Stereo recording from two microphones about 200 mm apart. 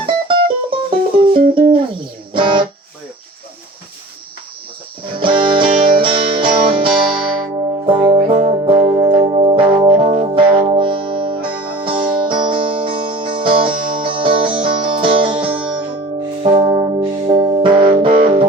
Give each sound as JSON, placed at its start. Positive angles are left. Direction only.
{"t": 0.0, "sound": "music", "side_deg": -25}
{"t": 5.1, "sound": "music", "side_deg": -25}
{"t": 8.4, "sound": "music", "side_deg": -30}